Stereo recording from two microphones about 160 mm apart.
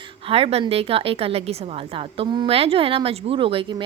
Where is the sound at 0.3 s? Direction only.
35° right (ahead or behind).